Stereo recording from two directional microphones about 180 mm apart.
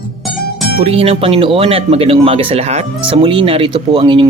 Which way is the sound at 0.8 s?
35° right (ahead or behind).